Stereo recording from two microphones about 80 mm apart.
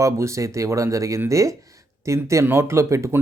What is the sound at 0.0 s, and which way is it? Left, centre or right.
Speech, right.